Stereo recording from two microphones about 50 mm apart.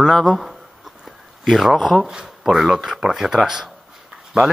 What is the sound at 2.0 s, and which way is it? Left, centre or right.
Speech, centre.